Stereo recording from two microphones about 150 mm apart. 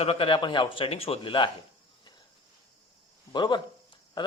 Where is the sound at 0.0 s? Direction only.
40° left (ahead or behind).